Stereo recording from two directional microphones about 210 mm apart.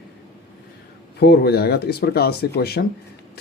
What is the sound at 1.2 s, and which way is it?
Speech, 50° left (ahead or behind).